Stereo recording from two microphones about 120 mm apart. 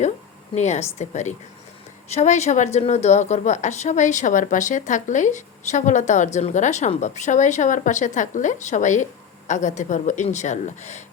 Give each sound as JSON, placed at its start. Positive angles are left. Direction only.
{"t": 0.5, "sound": "a woman's voice", "side_deg": 70}
{"t": 2.7, "sound": "a woman's voice", "side_deg": 65}